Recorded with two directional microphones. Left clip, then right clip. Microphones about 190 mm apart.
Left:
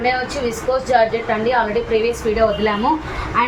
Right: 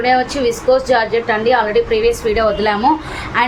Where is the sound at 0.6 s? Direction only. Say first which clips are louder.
Right 1 dB; 65° right (ahead or behind).